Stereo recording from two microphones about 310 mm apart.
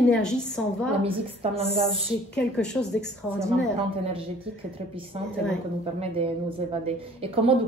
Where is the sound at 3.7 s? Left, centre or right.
Centre.